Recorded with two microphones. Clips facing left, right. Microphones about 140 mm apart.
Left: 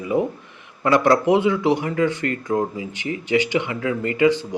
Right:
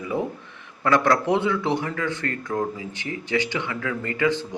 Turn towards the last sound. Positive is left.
turn(degrees=15)  # may be behind; listen again after turning